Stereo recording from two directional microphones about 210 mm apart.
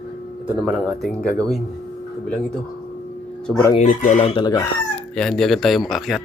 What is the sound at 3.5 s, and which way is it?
Speech, 10° left (ahead or behind).